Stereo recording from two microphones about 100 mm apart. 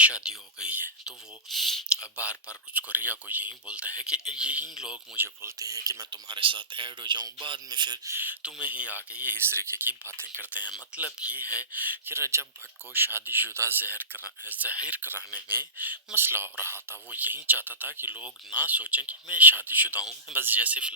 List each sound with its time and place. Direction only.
0.0 s speech: 10° right (ahead or behind)
2.0 s speech: 10° right (ahead or behind)
5.1 s speech: 25° right (ahead or behind); by 7.9 s 50° right (ahead or behind)
8.0 s speech: 20° right (ahead or behind)
10.9 s speech: 15° right (ahead or behind)